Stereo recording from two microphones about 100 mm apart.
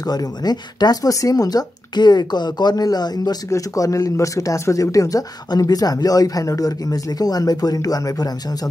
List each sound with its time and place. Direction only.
0.0 s speech: 40° left (ahead or behind)